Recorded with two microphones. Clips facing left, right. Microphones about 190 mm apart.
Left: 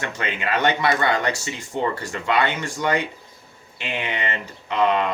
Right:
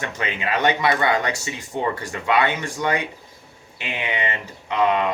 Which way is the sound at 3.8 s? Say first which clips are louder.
Right 1 dB; 15° right (ahead or behind).